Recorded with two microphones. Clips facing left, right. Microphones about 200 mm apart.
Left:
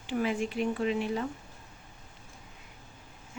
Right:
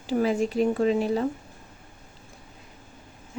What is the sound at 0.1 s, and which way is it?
Speech, 40° right (ahead or behind).